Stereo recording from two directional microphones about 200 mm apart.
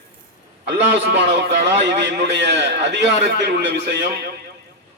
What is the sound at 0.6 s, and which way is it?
A man's voice, 55° right (ahead or behind).